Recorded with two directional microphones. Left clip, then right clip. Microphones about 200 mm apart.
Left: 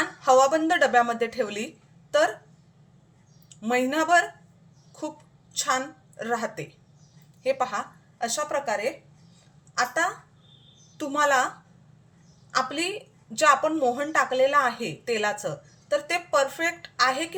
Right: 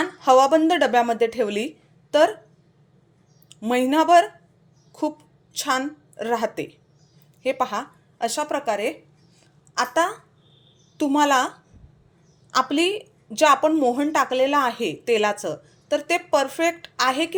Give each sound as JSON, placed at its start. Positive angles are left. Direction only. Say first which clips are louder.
{"t": 0.0, "sound": "speech", "louder": "right 3 dB", "side_deg": -30}
{"t": 3.5, "sound": "speech", "louder": "right 4 dB", "side_deg": -30}
{"t": 4.9, "sound": "a sound", "louder": "right 8 dB", "side_deg": -30}
{"t": 5.5, "sound": "a woman's voice", "louder": "right 2 dB", "side_deg": -30}